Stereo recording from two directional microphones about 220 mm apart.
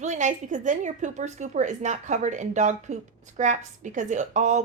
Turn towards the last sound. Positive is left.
turn(degrees=-35)  # may be behind; listen again after turning